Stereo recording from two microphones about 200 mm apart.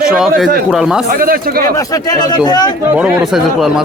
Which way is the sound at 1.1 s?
45° right (ahead or behind).